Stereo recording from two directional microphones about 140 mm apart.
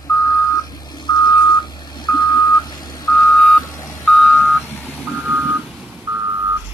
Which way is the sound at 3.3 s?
5° left (ahead or behind).